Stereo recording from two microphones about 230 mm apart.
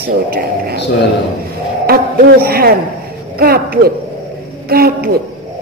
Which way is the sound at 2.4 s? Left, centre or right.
Right.